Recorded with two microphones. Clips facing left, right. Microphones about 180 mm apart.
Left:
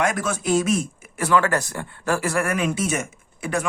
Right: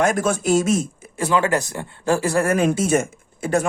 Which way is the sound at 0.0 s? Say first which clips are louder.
Right 4 dB; 50° right (ahead or behind).